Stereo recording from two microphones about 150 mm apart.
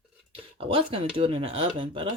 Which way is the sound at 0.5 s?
35° right (ahead or behind).